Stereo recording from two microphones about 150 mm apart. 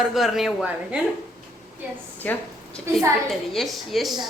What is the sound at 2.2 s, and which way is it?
Speech, 10° left (ahead or behind).